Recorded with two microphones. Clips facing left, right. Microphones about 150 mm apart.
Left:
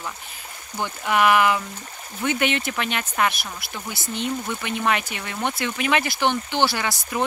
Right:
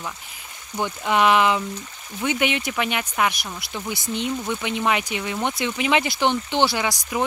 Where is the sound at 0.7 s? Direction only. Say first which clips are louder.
Right 1 dB; 15° right (ahead or behind).